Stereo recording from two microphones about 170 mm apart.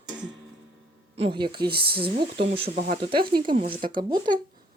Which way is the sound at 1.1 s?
30° right (ahead or behind).